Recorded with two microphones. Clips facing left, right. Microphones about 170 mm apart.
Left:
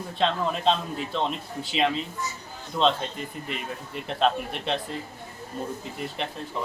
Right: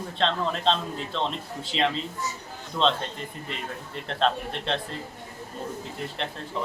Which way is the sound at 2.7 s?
5° left (ahead or behind).